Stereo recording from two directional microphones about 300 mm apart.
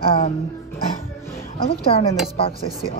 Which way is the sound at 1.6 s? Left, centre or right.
Centre.